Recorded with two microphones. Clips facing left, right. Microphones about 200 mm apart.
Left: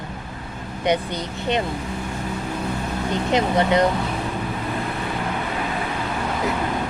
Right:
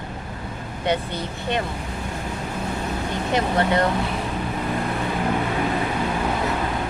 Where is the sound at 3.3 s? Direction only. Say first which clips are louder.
Left 2 dB; 20° left (ahead or behind).